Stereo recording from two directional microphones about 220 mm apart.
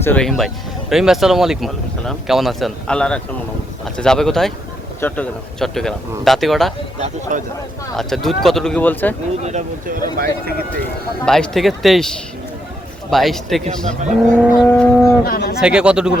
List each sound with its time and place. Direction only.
0.0 s speech: 5° left (ahead or behind)
7.0 s speech: 35° right (ahead or behind)
7.9 s speech: centre (ahead or behind)
9.4 s speech: 30° right (ahead or behind)
11.3 s speech: centre (ahead or behind)
13.7 s speech: 35° right (ahead or behind)
14.3 s speech: centre (ahead or behind)
15.2 s speech: 45° left (ahead or behind)
15.6 s speech: 5° right (ahead or behind)